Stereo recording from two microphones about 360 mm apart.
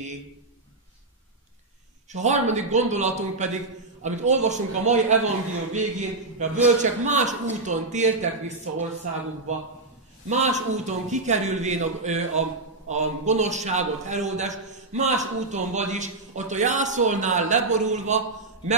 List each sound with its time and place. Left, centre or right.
2.0 s a man's voice: centre
10.8 s a man's voice: centre